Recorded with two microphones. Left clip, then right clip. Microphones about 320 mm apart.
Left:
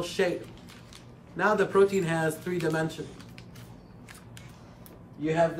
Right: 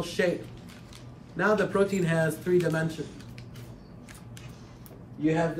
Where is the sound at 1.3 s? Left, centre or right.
Centre.